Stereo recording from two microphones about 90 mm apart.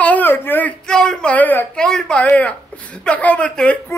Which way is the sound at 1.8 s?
5° left (ahead or behind).